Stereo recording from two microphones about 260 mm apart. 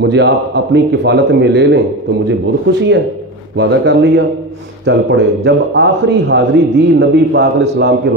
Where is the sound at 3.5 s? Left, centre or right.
Right.